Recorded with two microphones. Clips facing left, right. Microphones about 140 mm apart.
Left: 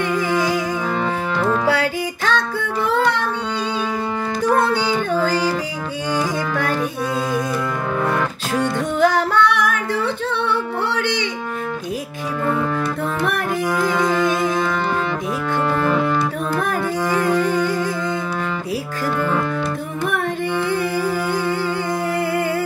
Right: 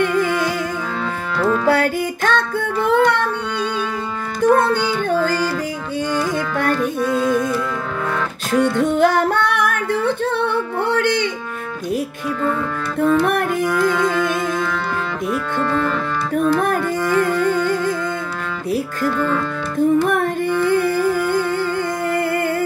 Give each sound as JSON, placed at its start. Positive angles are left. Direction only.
{"t": 0.1, "sound": "music", "side_deg": 15}
{"t": 1.7, "sound": "music", "side_deg": -50}
{"t": 4.6, "sound": "music", "side_deg": 15}
{"t": 6.7, "sound": "music", "side_deg": 10}
{"t": 8.5, "sound": "music", "side_deg": 15}
{"t": 8.9, "sound": "singing", "side_deg": -55}
{"t": 13.8, "sound": "music", "side_deg": 15}
{"t": 15.7, "sound": "music", "side_deg": 15}
{"t": 19.0, "sound": "music", "side_deg": 15}
{"t": 21.0, "sound": "humming", "side_deg": 15}